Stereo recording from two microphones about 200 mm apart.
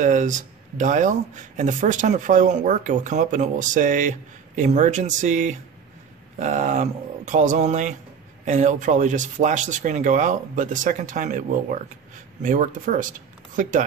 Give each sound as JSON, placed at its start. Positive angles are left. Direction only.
{"t": 0.0, "sound": "speech", "side_deg": -40}